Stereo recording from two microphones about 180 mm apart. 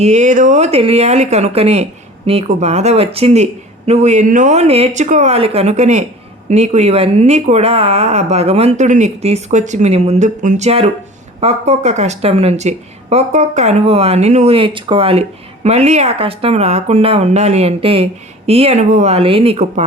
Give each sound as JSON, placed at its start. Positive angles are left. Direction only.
{"t": 0.0, "sound": "speech", "side_deg": -40}